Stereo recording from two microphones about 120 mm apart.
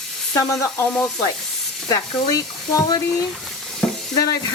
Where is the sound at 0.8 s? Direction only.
10° left (ahead or behind).